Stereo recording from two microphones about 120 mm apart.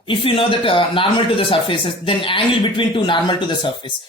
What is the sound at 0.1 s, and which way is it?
Speech, 45° left (ahead or behind).